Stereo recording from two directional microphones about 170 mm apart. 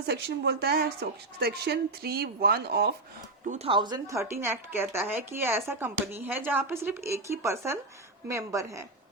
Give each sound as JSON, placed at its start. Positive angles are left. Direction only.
{"t": 0.1, "sound": "a woman's voice", "side_deg": -75}
{"t": 3.4, "sound": "speech", "side_deg": -45}
{"t": 3.7, "sound": "a woman's voice", "side_deg": -25}